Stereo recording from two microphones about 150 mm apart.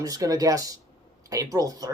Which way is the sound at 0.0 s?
25° right (ahead or behind).